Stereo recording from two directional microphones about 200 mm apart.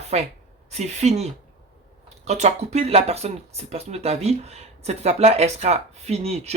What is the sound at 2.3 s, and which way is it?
Speech, 35° right (ahead or behind).